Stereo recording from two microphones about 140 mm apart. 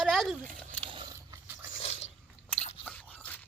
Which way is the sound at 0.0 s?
Centre (ahead or behind).